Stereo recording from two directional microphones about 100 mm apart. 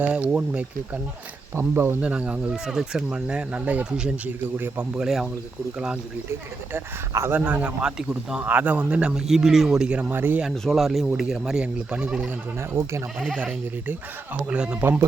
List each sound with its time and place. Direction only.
0.0 s speech: 15° right (ahead or behind)
1.5 s speech: 25° right (ahead or behind)
2.0 s speech: 10° right (ahead or behind)
5.0 s speech: 5° right (ahead or behind)
6.7 s speech: 25° right (ahead or behind)
10.5 s speech: 5° left (ahead or behind)
14.5 s speech: 10° right (ahead or behind)